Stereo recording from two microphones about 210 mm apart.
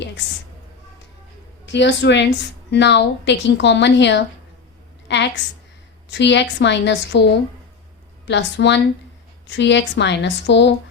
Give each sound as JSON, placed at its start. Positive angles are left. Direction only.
{"t": 1.6, "sound": "a woman's voice", "side_deg": 55}
{"t": 5.0, "sound": "a sound", "side_deg": 55}
{"t": 6.1, "sound": "speech", "side_deg": 55}